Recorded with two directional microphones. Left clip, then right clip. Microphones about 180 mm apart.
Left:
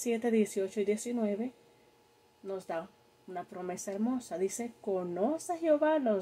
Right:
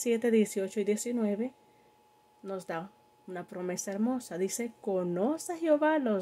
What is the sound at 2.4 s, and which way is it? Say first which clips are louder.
Speech: even; 35° right (ahead or behind).